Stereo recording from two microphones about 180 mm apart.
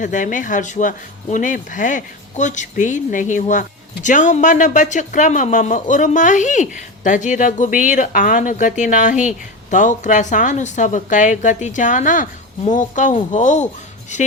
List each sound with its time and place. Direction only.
0.0 s speech: 45° left (ahead or behind)